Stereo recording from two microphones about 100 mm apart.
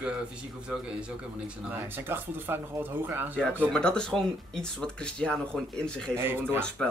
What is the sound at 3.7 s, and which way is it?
Speech, 10° left (ahead or behind).